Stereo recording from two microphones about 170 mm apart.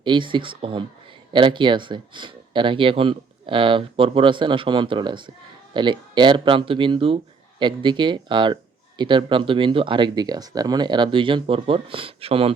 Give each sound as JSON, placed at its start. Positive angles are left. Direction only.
{"t": 0.0, "sound": "speech", "side_deg": -30}